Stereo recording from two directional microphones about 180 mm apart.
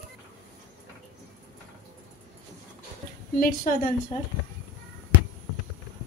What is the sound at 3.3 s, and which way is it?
Speech, 50° left (ahead or behind).